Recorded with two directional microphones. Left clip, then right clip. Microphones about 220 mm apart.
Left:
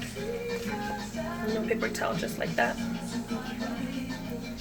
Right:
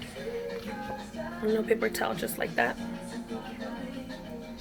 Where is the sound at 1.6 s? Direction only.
55° right (ahead or behind).